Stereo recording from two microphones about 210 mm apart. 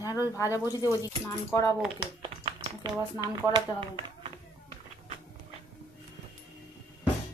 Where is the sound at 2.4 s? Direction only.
25° right (ahead or behind).